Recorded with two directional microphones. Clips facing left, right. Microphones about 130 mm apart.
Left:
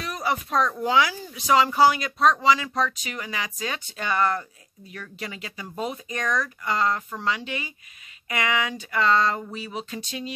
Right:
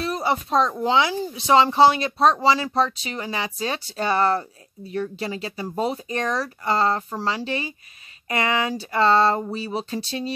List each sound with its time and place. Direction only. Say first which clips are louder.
0.0 s speech: right 4 dB; 30° right (ahead or behind)